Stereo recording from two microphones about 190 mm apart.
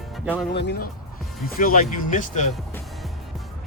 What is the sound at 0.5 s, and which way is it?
Speech, 60° left (ahead or behind).